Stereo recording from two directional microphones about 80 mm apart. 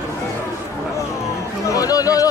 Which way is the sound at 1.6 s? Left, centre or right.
Left.